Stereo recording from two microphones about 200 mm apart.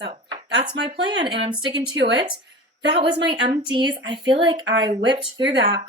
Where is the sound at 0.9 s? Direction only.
25° right (ahead or behind).